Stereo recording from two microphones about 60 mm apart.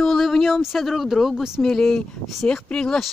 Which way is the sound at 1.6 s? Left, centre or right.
Centre.